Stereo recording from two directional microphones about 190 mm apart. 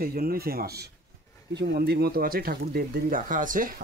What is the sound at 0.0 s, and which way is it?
Speech, 50° right (ahead or behind).